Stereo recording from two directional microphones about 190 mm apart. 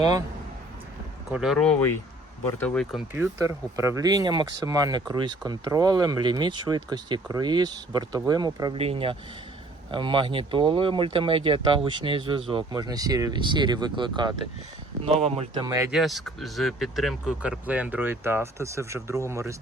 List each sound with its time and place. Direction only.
0.0 s speech: 20° right (ahead or behind)
1.3 s speech: centre (ahead or behind)
3.1 s speech: 10° right (ahead or behind)
8.8 s speech: 30° right (ahead or behind)
15.6 s speech: 15° right (ahead or behind)
15.9 s speech: centre (ahead or behind)